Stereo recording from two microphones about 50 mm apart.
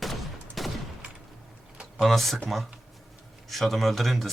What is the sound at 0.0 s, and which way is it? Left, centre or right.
Fusillade, centre.